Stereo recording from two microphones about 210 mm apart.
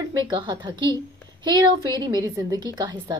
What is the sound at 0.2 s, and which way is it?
A woman's voice, 20° right (ahead or behind).